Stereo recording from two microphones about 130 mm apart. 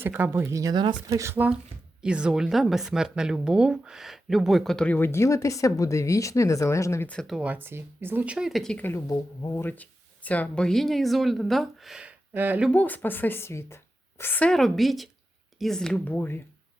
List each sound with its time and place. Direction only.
0.0 s speech: 15° right (ahead or behind); by 1.2 s 35° right (ahead or behind)
1.2 s a woman's voice: 15° right (ahead or behind); by 7.1 s 20° left (ahead or behind)
7.1 s a woman's voice: 5° left (ahead or behind)
7.3 s speech: 10° right (ahead or behind)
8.8 s a woman's voice: 20° left (ahead or behind); by 12.7 s 10° right (ahead or behind)
12.7 s a woman's voice: 15° left (ahead or behind)